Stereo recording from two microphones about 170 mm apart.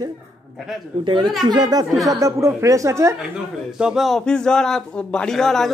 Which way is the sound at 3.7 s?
5° right (ahead or behind).